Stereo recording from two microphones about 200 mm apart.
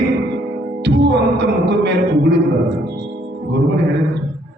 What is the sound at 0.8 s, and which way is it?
Music, 60° right (ahead or behind).